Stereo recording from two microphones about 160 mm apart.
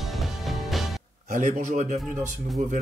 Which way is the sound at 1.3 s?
50° right (ahead or behind).